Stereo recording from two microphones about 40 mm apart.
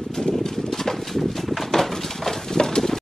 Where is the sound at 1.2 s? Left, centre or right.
Centre.